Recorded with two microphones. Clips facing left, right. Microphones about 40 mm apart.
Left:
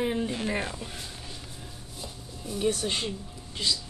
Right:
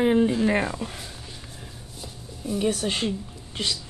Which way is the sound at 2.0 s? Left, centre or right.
Centre.